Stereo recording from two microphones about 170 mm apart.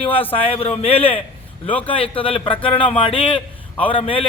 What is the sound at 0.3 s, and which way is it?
A man's voice, 35° left (ahead or behind).